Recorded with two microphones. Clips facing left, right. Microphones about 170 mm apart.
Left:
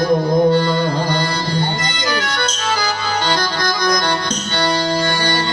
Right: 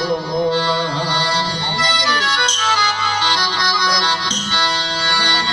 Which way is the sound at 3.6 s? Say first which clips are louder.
Left 5 dB; 55° left (ahead or behind).